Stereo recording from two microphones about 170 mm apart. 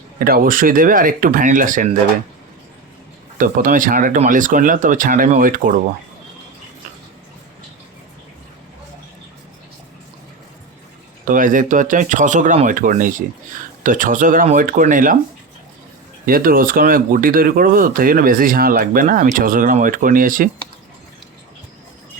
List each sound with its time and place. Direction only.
0.2 s speech: 60° right (ahead or behind)
3.3 s speech: 50° right (ahead or behind)
11.3 s speech: 50° right (ahead or behind)
16.2 s speech: 60° right (ahead or behind)